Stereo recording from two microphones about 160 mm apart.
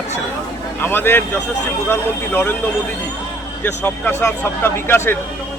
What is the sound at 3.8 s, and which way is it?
Speech, 15° left (ahead or behind).